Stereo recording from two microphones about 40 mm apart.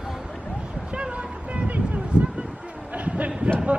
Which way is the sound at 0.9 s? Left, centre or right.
Right.